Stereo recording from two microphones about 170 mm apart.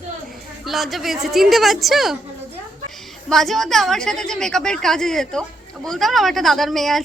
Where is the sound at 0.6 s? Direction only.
Centre (ahead or behind).